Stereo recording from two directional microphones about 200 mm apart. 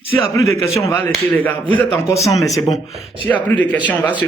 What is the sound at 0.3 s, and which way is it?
Speech, 15° left (ahead or behind).